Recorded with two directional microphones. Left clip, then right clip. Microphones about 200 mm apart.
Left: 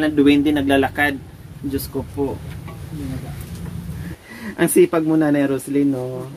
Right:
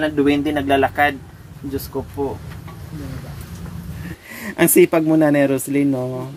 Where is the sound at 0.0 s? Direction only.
10° left (ahead or behind).